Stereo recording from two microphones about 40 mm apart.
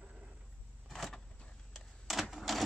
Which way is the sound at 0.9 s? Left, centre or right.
Centre.